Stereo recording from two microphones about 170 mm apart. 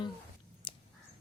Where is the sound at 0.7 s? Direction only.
30° left (ahead or behind).